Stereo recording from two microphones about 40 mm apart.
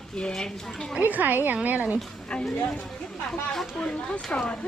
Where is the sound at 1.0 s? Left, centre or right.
Right.